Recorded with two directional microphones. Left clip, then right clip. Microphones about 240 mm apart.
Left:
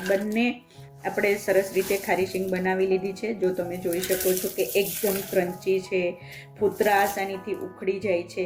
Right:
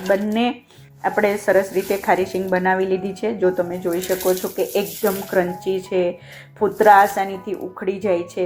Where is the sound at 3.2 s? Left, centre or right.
Right.